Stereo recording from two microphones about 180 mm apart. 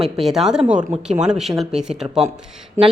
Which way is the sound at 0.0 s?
Centre (ahead or behind).